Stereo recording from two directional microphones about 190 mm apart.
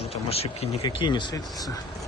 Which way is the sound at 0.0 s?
30° left (ahead or behind).